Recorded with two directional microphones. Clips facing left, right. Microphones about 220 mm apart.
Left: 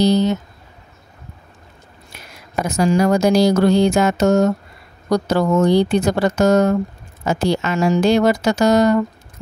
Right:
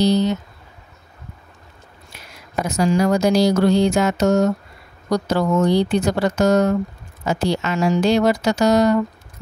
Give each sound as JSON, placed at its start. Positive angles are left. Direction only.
{"t": 0.0, "sound": "speech", "side_deg": 50}
{"t": 2.6, "sound": "speech", "side_deg": 50}